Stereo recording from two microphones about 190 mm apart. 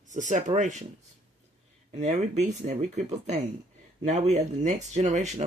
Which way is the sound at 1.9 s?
40° right (ahead or behind).